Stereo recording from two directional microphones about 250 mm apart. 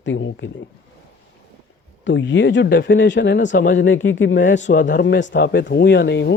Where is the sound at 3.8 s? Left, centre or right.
Left.